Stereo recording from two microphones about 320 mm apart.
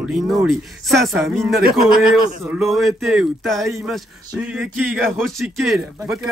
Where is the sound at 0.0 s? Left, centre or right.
Centre.